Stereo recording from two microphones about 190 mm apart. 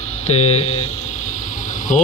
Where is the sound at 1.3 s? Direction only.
40° left (ahead or behind).